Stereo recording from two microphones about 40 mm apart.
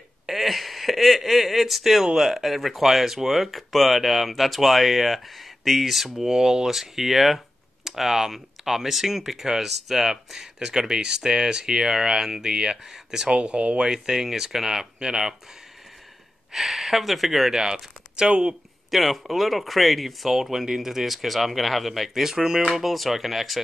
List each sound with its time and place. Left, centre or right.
0.3 s speech: centre
13.3 s speech: right
13.7 s speech: centre
16.5 s speech: centre
17.5 s speech: centre
18.9 s speech: centre
22.8 s speech: centre